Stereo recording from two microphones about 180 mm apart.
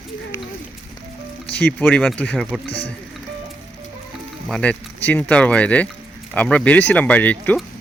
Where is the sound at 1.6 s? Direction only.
10° left (ahead or behind).